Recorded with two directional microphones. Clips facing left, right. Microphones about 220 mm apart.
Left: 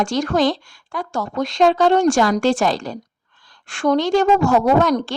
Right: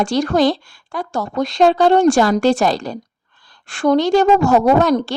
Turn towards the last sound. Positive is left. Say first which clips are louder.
# right 2 dB
turn(degrees=-35)  # may be behind; listen again after turning